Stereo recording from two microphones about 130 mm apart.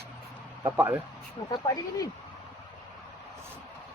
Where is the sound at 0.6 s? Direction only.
20° right (ahead or behind).